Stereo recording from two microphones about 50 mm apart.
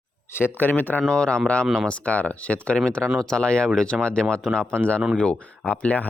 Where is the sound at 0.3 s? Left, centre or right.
Left.